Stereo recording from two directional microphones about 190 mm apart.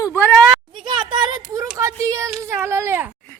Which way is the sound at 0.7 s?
25° right (ahead or behind).